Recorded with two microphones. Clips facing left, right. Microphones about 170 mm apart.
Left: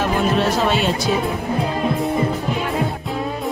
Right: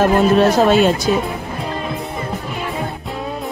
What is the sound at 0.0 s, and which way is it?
Speech, 45° right (ahead or behind).